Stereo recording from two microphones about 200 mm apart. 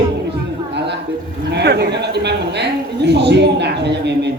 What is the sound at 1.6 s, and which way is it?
A man's voice, 55° right (ahead or behind).